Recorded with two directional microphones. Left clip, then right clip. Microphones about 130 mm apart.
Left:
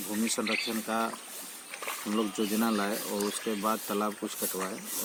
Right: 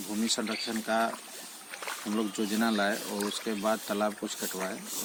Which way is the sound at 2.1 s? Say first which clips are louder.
Left 2 dB; 25° right (ahead or behind).